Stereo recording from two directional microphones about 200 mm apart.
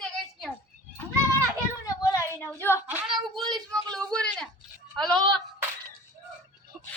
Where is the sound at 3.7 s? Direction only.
5° left (ahead or behind).